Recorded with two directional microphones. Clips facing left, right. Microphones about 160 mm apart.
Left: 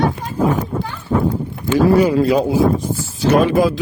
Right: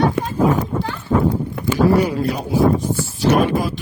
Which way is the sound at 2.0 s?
90° left.